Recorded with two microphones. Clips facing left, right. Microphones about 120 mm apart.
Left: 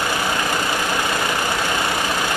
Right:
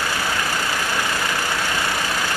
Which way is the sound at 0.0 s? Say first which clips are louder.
Left 2 dB; 20° left (ahead or behind).